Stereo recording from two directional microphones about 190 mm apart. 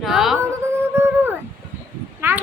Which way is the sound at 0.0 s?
Centre (ahead or behind).